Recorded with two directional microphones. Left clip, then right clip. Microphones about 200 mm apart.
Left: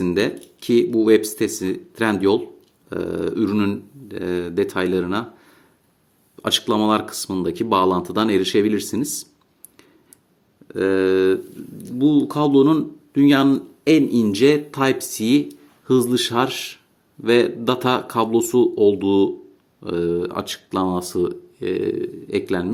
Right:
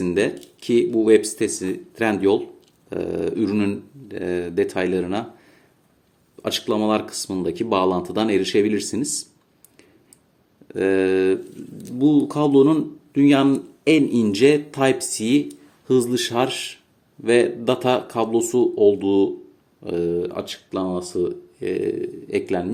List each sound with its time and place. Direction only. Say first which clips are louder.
0.0 s speech: even; 20° left (ahead or behind)
10.7 s speech: left 1 dB; 10° left (ahead or behind)